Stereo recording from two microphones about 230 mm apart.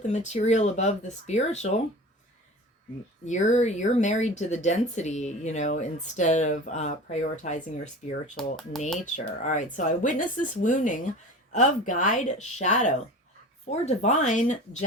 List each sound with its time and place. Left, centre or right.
0.0 s speech: left
3.2 s speech: left
8.4 s speech: centre
9.0 s speech: left